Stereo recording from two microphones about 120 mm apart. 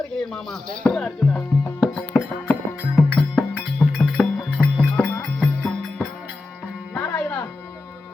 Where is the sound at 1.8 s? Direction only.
Centre (ahead or behind).